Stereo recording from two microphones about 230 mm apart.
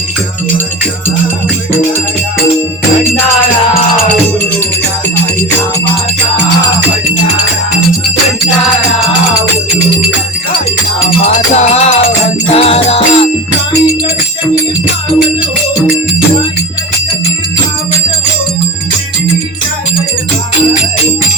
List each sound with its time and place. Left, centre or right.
11.3 s music: left